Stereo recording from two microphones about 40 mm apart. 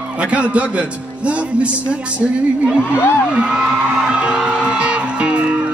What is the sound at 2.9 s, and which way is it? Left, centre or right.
Music, left.